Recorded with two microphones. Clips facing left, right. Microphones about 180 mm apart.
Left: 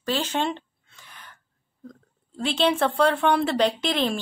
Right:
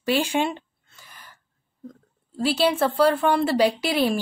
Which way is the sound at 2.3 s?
5° right (ahead or behind).